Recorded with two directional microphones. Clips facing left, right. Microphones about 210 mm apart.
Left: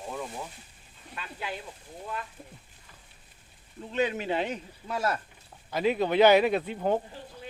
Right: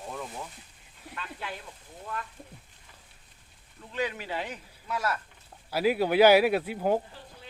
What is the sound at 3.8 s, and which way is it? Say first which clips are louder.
Speech: left 4 dB; 20° left (ahead or behind).